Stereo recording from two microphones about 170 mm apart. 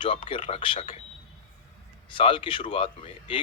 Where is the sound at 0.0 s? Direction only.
30° left (ahead or behind).